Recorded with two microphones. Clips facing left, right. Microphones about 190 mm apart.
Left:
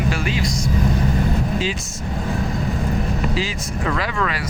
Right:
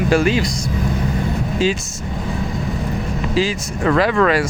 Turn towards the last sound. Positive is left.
turn(degrees=-50)  # may be behind; listen again after turning